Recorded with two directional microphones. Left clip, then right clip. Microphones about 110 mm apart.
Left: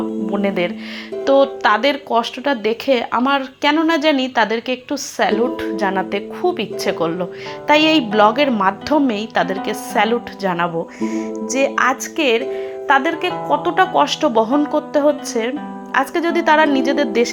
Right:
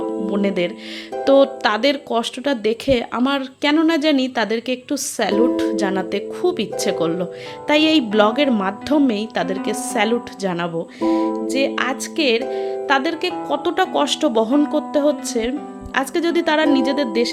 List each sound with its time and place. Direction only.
0.4 s speech: 40° right (ahead or behind)
1.2 s speech: 70° right (ahead or behind); by 10.7 s 45° right (ahead or behind)
11.7 s a woman's voice: centre (ahead or behind)
12.1 s speech: 20° right (ahead or behind)
13.5 s speech: 35° right (ahead or behind)
17.1 s a woman's voice: 10° right (ahead or behind)